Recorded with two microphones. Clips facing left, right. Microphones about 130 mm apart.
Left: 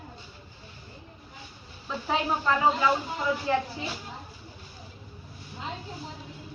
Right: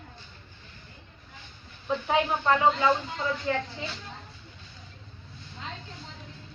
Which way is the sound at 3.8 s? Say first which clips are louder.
Left 2 dB; 25° left (ahead or behind).